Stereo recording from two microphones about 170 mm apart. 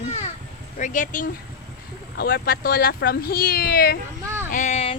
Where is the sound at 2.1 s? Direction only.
65° left (ahead or behind).